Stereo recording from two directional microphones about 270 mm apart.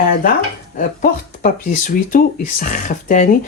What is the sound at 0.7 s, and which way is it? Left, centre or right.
Speech, left.